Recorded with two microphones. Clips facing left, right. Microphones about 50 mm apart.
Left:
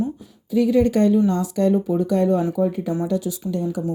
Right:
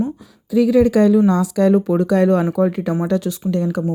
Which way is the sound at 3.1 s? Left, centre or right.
Right.